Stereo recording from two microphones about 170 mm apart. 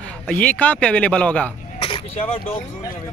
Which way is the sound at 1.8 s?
35° left (ahead or behind).